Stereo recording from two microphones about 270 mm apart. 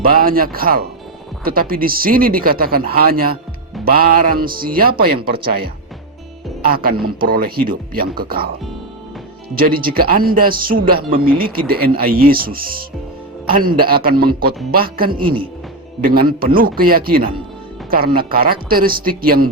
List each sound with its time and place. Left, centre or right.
0.0 s speech: right
9.6 s speech: right